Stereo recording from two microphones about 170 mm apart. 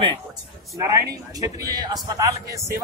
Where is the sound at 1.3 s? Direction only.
20° right (ahead or behind).